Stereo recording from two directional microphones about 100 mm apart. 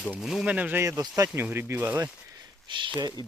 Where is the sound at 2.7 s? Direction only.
50° right (ahead or behind).